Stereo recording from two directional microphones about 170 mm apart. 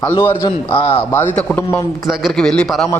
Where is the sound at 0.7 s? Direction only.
35° left (ahead or behind).